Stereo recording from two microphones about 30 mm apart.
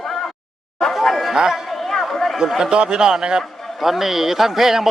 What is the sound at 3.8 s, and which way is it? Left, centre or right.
A man's voice, centre.